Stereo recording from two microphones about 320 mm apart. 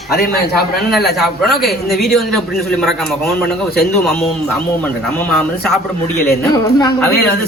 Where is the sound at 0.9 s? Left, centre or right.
Centre.